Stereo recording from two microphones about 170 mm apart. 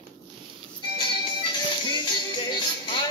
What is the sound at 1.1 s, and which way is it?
Music, 30° left (ahead or behind).